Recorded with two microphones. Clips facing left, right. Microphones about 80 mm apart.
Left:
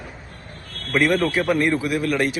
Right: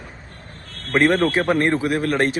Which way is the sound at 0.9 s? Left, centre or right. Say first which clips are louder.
Right 2 dB; right.